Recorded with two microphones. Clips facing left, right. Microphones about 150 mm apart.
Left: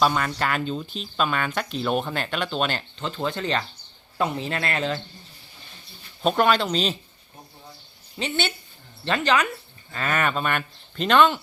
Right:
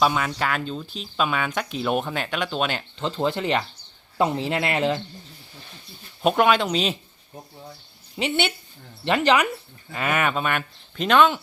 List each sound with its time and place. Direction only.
0.0 s speech: 5° right (ahead or behind)
3.0 s speech: 20° right (ahead or behind)
6.2 s speech: 10° right (ahead or behind)
8.2 s speech: 20° right (ahead or behind)